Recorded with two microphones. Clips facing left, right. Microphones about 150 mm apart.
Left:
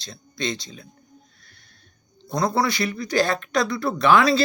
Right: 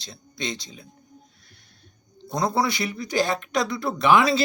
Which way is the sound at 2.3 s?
20° right (ahead or behind).